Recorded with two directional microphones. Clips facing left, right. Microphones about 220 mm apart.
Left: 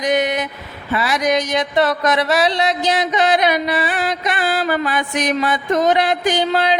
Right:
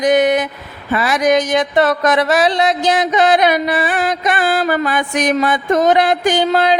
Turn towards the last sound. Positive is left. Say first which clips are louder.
# right 3 dB
turn(degrees=-50)  # may be behind; listen again after turning